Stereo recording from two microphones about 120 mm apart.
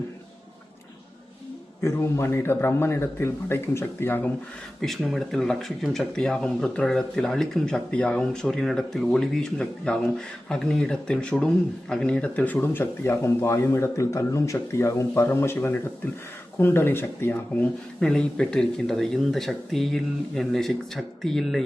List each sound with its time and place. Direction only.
1.8 s a man's voice: 25° left (ahead or behind)
4.8 s speech: centre (ahead or behind)